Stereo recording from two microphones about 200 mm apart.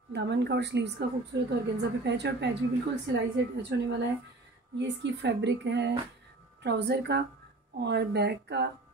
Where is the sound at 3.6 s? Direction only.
60° right (ahead or behind).